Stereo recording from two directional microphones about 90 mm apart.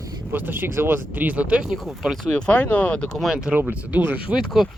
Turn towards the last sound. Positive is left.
turn(degrees=-5)  # may be behind; listen again after turning